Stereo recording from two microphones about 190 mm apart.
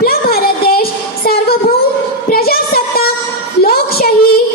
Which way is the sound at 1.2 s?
55° left (ahead or behind).